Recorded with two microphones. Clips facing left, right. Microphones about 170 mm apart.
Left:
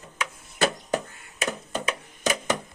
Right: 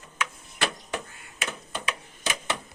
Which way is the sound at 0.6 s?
40° left (ahead or behind).